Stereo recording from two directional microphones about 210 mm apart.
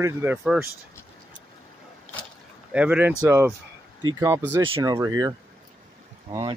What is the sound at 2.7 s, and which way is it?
Speech, 5° right (ahead or behind).